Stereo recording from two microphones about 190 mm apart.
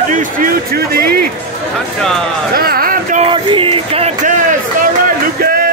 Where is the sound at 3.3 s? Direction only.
25° right (ahead or behind).